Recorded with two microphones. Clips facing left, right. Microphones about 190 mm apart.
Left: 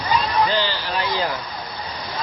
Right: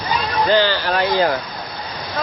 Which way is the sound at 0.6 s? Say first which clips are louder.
Right 6 dB; 55° right (ahead or behind).